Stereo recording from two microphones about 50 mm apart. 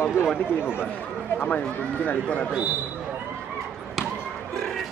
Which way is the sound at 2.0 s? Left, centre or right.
Left.